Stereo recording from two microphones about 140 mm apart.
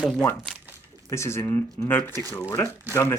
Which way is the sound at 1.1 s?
20° left (ahead or behind).